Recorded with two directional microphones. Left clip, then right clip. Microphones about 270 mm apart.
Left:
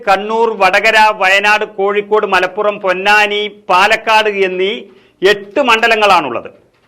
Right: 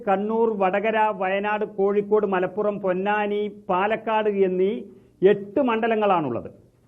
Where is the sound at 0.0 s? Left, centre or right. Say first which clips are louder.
Left 10 dB; centre.